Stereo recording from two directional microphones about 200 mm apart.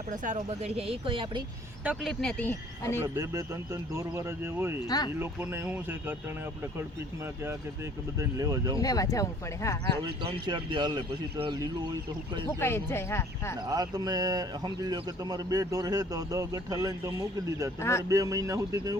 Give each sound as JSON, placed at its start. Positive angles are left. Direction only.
{"t": 0.1, "sound": "speech", "side_deg": -35}
{"t": 1.8, "sound": "speech", "side_deg": -5}
{"t": 2.2, "sound": "speech", "side_deg": 10}
{"t": 3.0, "sound": "speech", "side_deg": -15}
{"t": 4.9, "sound": "speech", "side_deg": 20}
{"t": 5.2, "sound": "speech", "side_deg": -10}
{"t": 8.2, "sound": "speech", "side_deg": -15}
{"t": 8.8, "sound": "speech", "side_deg": 15}
{"t": 10.0, "sound": "speech", "side_deg": -20}
{"t": 12.5, "sound": "speech", "side_deg": 10}
{"t": 13.7, "sound": "speech", "side_deg": -20}
{"t": 17.7, "sound": "speech", "side_deg": 15}
{"t": 18.1, "sound": "speech", "side_deg": -15}